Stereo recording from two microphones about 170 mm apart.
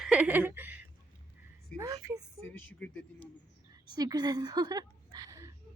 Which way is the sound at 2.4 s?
10° left (ahead or behind).